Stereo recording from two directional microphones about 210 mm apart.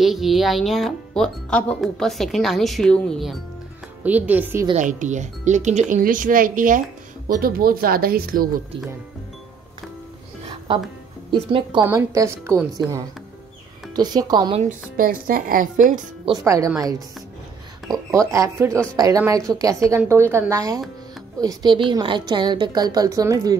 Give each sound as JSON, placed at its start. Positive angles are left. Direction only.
{"t": 0.0, "sound": "a woman's voice", "side_deg": 0}
{"t": 4.7, "sound": "speech", "side_deg": -35}
{"t": 11.8, "sound": "a woman's voice", "side_deg": -10}
{"t": 14.7, "sound": "speech", "side_deg": -40}
{"t": 16.3, "sound": "a woman's voice", "side_deg": -15}
{"t": 18.3, "sound": "a woman's voice", "side_deg": -15}